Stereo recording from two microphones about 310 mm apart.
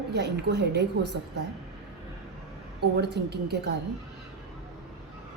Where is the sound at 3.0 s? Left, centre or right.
Right.